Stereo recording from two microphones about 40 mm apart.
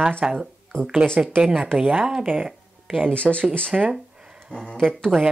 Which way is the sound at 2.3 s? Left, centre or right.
Right.